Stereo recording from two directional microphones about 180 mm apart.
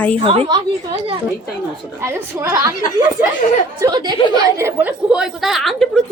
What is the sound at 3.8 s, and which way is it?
A woman's voice, 25° right (ahead or behind).